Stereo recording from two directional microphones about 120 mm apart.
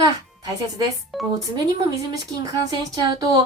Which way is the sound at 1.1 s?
Centre (ahead or behind).